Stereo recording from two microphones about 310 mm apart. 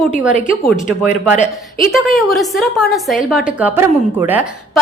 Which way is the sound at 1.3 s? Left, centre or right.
Left.